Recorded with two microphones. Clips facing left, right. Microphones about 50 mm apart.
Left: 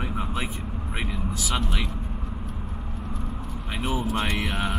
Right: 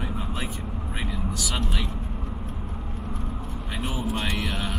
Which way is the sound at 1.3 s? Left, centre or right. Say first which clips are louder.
Left 4 dB; centre.